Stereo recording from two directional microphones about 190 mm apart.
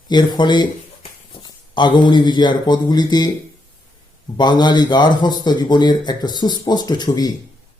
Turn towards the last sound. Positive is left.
turn(degrees=20)  # may be behind; listen again after turning